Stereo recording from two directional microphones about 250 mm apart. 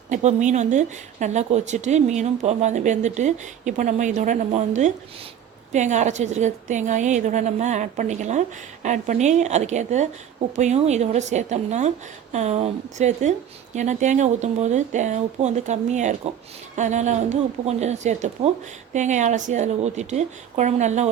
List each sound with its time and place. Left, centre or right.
0.1 s speech: right